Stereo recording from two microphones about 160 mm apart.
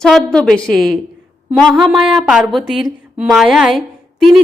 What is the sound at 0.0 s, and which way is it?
A woman's voice, 5° left (ahead or behind).